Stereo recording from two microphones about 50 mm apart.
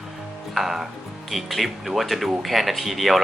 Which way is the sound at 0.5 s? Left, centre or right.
Centre.